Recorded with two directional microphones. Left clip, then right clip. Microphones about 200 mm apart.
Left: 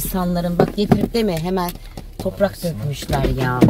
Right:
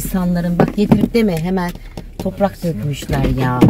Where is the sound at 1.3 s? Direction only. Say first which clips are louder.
Right 1 dB; 20° left (ahead or behind).